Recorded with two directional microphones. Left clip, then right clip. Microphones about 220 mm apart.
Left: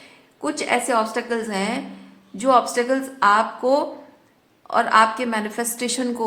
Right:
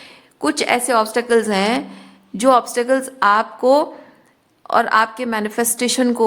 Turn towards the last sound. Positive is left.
turn(degrees=-35)  # may be behind; listen again after turning